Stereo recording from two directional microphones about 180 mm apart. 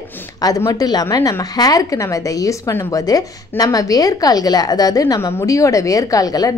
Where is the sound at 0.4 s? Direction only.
20° left (ahead or behind).